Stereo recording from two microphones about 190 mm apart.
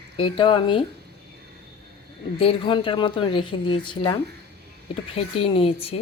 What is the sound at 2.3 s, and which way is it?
Speech, 30° left (ahead or behind).